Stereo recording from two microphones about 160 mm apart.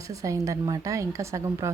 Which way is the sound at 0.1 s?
20° right (ahead or behind).